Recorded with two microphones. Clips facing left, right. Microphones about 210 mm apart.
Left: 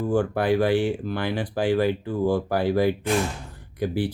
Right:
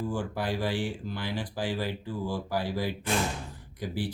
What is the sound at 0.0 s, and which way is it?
Speech, 60° left (ahead or behind).